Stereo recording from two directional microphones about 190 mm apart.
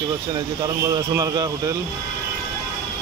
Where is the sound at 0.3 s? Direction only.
20° right (ahead or behind).